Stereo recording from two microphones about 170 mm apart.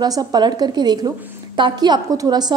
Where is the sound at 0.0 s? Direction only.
25° right (ahead or behind).